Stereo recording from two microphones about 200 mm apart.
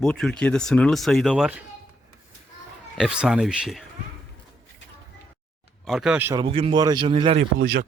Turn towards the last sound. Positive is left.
turn(degrees=-55)  # may be behind; listen again after turning